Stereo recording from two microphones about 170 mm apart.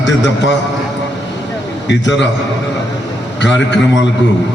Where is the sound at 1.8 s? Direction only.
90° left.